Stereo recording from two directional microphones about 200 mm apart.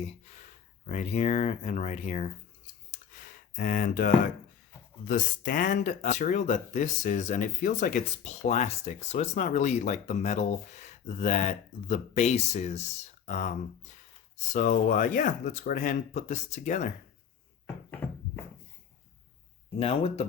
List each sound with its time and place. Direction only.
0.9 s speech: 35° left (ahead or behind)
3.1 s gasp: 40° left (ahead or behind)
5.0 s speech: 40° left (ahead or behind)
19.8 s speech: 30° left (ahead or behind)